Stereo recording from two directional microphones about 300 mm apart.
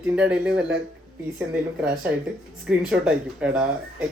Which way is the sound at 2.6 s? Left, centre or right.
Centre.